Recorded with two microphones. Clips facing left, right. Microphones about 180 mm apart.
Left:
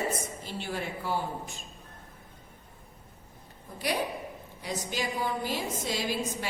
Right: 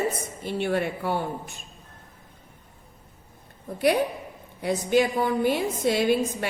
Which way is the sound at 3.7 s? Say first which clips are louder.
Right 9 dB; 60° right (ahead or behind).